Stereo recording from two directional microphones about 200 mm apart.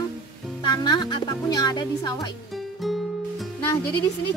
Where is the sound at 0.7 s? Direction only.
20° left (ahead or behind).